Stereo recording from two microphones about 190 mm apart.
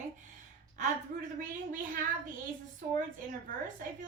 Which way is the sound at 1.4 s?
45° right (ahead or behind).